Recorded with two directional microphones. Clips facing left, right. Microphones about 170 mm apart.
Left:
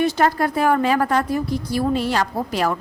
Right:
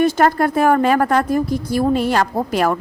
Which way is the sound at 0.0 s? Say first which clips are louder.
Right 4 dB; 45° right (ahead or behind).